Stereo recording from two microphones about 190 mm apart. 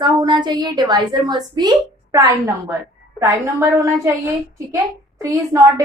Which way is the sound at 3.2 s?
15° right (ahead or behind).